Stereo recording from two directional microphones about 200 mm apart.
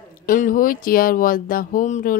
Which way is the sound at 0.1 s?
40° left (ahead or behind).